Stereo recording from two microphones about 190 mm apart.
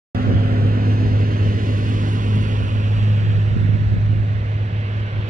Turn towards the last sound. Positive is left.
turn(degrees=-40)  # may be behind; listen again after turning